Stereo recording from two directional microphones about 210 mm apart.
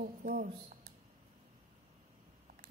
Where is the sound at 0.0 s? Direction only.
40° right (ahead or behind).